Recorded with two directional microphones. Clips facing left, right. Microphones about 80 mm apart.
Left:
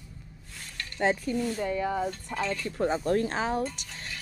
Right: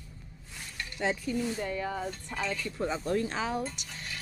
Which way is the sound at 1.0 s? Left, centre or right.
Left.